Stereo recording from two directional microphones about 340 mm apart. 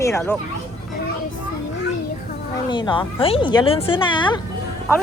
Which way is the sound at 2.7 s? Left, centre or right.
Centre.